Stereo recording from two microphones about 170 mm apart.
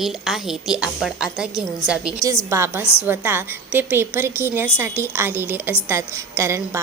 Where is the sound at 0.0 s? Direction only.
Centre (ahead or behind).